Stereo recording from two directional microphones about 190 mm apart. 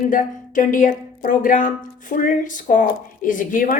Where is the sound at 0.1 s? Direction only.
45° left (ahead or behind).